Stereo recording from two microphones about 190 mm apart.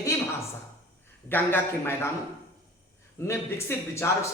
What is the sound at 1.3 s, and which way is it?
Speech, 10° left (ahead or behind).